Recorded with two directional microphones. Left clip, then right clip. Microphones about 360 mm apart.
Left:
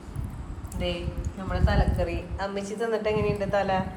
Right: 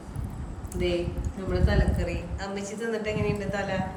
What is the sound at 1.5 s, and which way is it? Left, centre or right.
Speech, centre.